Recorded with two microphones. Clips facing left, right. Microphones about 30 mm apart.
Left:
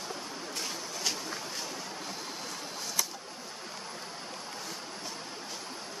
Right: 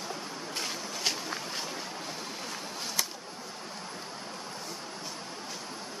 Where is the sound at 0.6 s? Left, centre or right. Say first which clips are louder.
Right 2 dB; right.